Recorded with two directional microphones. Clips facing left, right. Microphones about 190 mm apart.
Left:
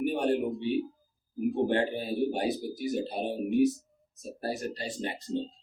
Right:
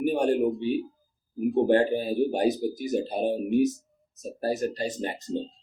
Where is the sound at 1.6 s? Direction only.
45° right (ahead or behind).